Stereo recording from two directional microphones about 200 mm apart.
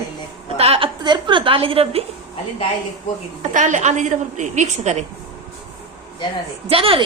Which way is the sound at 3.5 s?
40° right (ahead or behind).